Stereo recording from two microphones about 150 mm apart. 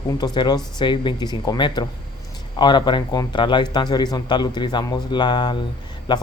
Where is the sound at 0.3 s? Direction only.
30° left (ahead or behind).